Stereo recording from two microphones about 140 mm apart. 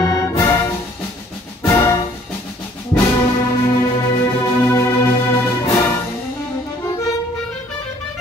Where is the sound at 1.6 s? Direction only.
25° left (ahead or behind).